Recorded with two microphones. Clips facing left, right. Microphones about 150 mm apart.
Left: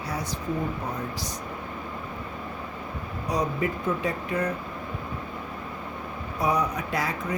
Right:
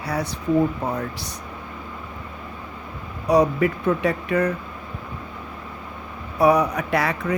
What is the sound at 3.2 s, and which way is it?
Speech, 65° right (ahead or behind).